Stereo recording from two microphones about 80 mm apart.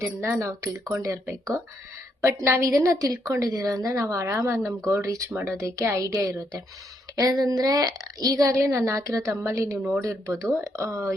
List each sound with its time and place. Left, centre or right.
0.0 s a woman's voice: right
4.4 s a woman's voice: right